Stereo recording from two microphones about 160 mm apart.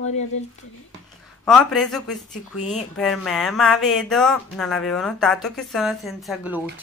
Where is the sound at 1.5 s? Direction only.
Centre (ahead or behind).